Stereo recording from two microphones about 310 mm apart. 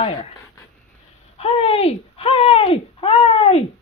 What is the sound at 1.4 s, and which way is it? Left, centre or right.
Speech, centre.